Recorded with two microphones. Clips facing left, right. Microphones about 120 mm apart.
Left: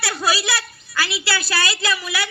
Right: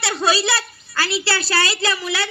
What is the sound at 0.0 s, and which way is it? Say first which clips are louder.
A child's voice: right 3 dB; 25° right (ahead or behind).